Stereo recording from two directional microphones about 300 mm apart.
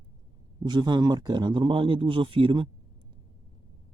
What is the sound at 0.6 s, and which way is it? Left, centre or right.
Speech, centre.